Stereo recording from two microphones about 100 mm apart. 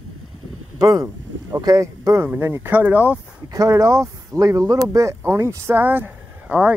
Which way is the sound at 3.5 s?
35° right (ahead or behind).